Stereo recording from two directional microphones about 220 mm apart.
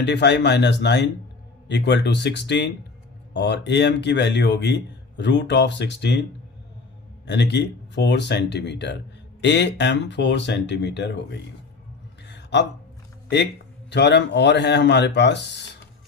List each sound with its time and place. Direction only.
0.0 s speech: 50° left (ahead or behind)
7.3 s speech: 50° left (ahead or behind)
12.2 s a sound: 50° left (ahead or behind)
13.9 s speech: 50° left (ahead or behind)